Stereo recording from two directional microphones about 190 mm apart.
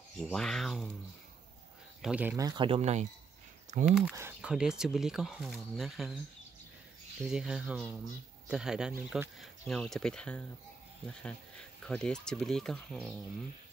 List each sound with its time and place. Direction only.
0.2 s speech: centre (ahead or behind)
2.0 s speech: 5° right (ahead or behind); by 3.1 s 35° right (ahead or behind)
3.8 s speech: 5° right (ahead or behind)
7.2 s speech: 5° right (ahead or behind)